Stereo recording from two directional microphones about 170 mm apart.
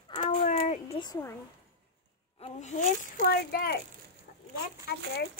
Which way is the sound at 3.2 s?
65° left (ahead or behind).